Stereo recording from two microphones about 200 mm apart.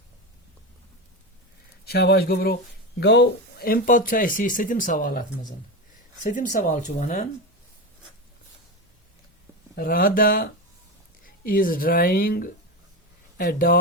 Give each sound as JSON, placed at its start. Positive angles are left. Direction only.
{"t": 1.8, "sound": "speech", "side_deg": 55}
{"t": 6.2, "sound": "speech", "side_deg": 40}
{"t": 9.7, "sound": "speech", "side_deg": 45}